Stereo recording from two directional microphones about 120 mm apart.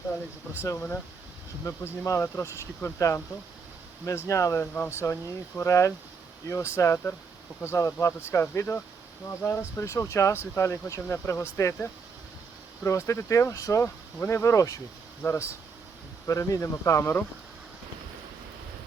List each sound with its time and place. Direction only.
0.6 s speech: 20° left (ahead or behind)
4.3 s speech: 25° left (ahead or behind)